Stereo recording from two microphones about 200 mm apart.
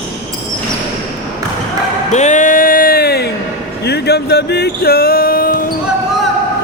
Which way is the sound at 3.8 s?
55° left (ahead or behind).